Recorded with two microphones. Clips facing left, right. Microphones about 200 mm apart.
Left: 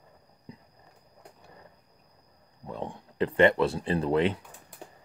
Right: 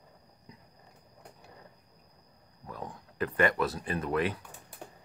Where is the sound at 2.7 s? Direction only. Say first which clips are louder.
Left 5 dB; 25° left (ahead or behind).